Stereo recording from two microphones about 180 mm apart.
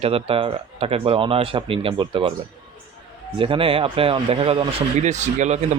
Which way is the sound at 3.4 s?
30° right (ahead or behind).